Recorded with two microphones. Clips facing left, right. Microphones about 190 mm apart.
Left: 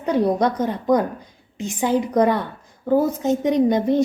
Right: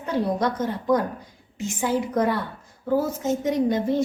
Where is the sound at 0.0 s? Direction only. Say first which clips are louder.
Left 5 dB; 15° left (ahead or behind).